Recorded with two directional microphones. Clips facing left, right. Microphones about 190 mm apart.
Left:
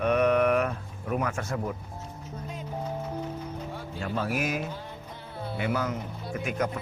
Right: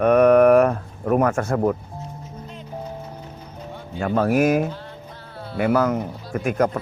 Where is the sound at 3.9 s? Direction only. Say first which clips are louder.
Right 11 dB; 55° right (ahead or behind).